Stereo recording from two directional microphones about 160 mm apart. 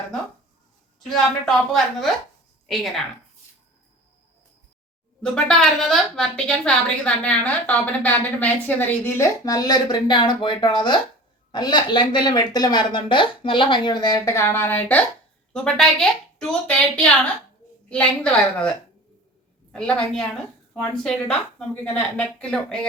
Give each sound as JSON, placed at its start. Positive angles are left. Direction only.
{"t": 0.9, "sound": "a woman's voice", "side_deg": 0}
{"t": 5.2, "sound": "a woman's voice", "side_deg": 5}
{"t": 19.7, "sound": "a woman's voice", "side_deg": 5}